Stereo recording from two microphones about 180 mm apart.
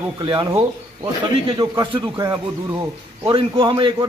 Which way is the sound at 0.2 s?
25° right (ahead or behind).